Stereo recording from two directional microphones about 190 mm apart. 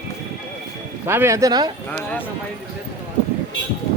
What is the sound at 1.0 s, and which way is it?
Speech, 15° right (ahead or behind).